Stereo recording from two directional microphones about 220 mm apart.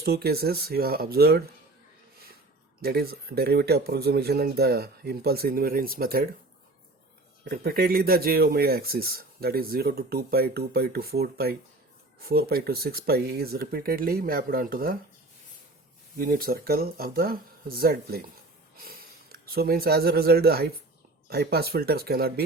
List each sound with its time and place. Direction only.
0.0 s speech: 45° right (ahead or behind)
2.8 s speech: 45° right (ahead or behind)
7.4 s speech: 45° right (ahead or behind)
16.1 s speech: 40° right (ahead or behind)
18.8 s a sound: 40° right (ahead or behind)
19.5 s speech: 45° right (ahead or behind)